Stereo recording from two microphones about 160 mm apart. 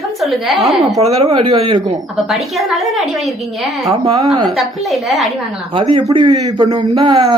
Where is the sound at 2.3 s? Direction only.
Centre (ahead or behind).